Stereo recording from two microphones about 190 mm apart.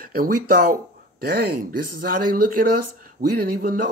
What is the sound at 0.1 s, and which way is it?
Speech, 50° right (ahead or behind).